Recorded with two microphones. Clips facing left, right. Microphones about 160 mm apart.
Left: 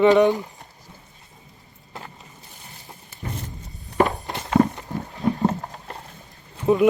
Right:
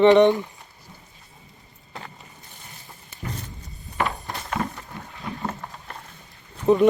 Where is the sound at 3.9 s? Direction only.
45° left (ahead or behind).